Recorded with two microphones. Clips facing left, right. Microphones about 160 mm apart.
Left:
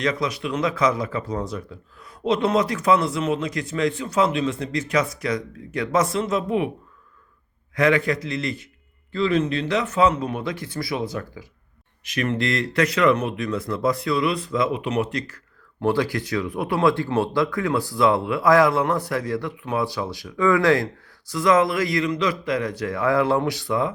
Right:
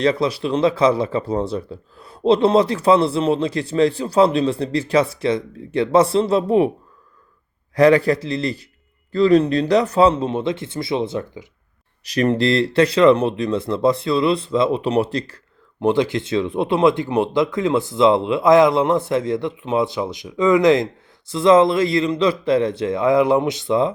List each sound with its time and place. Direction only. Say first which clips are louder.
0.0 s speech: right 6 dB; 30° right (ahead or behind)
7.8 s speech: right 6 dB; 35° right (ahead or behind)
12.0 s speech: right 6 dB; 35° right (ahead or behind)
15.8 s speech: right 4 dB; 20° right (ahead or behind)